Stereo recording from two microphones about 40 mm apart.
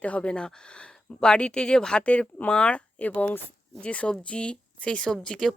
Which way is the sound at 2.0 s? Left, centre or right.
Left.